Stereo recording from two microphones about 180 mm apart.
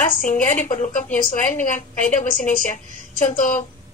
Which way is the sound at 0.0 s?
45° left (ahead or behind).